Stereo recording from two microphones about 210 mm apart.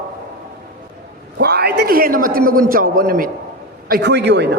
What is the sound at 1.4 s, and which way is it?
A man's voice, 50° right (ahead or behind).